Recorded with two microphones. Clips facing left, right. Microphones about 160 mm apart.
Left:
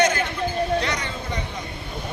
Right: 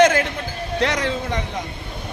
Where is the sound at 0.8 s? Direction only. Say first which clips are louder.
Right 5 dB; 90° right.